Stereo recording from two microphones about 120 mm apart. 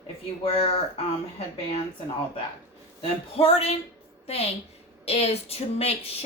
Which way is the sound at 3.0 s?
55° left (ahead or behind).